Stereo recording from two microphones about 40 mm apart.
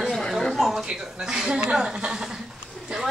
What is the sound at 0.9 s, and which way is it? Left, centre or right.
A child's voice, centre.